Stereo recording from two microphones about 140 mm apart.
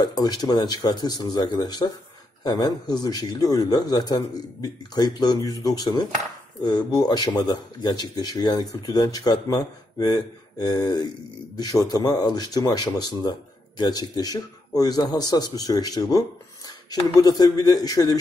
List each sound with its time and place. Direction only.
0.0 s speech: 30° left (ahead or behind)